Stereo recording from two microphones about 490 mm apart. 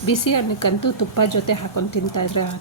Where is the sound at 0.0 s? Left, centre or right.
Left.